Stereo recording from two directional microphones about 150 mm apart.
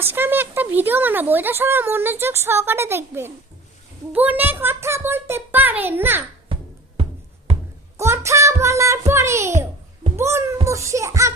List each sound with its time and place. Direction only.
0.0 s speech: 15° right (ahead or behind)
7.9 s a child's voice: 20° right (ahead or behind)
10.2 s music: 20° right (ahead or behind)